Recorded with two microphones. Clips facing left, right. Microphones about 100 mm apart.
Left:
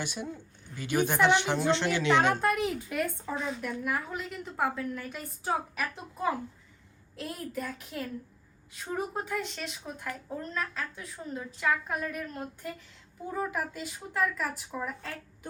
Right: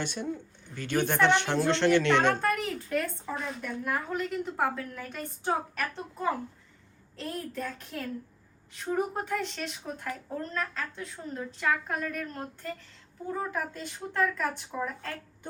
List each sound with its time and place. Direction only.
0.0 s speech: 5° left (ahead or behind)
2.4 s speech: 15° left (ahead or behind); by 15.2 s centre (ahead or behind)